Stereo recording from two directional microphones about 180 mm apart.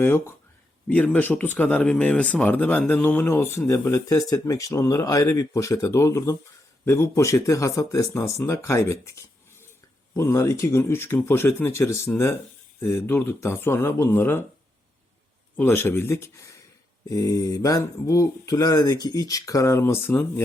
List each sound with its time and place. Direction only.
0.0 s speech: 15° left (ahead or behind)
10.2 s speech: 15° left (ahead or behind)
15.5 s speech: 10° left (ahead or behind)